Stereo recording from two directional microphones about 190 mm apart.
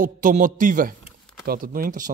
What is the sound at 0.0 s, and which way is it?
Speech, 45° right (ahead or behind).